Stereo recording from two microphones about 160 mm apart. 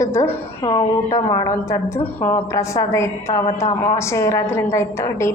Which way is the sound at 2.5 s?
20° left (ahead or behind).